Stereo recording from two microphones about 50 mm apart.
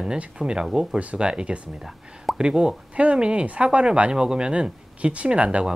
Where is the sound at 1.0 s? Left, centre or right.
Right.